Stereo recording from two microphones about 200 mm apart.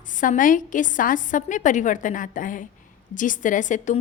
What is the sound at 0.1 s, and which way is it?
A woman's voice, 40° left (ahead or behind).